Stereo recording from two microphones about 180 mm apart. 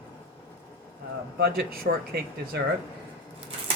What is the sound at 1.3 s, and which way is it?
Speech, 60° right (ahead or behind).